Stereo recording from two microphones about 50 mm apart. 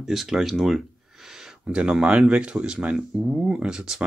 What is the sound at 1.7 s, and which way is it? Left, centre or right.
Speech, right.